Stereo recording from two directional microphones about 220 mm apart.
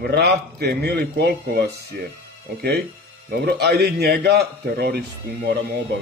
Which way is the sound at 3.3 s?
45° right (ahead or behind).